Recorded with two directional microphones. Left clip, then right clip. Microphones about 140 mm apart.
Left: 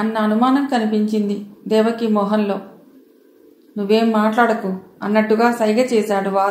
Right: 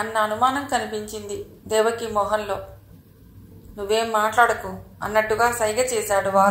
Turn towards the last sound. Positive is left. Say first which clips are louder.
# left 1 dB
turn(degrees=-50)  # may be behind; listen again after turning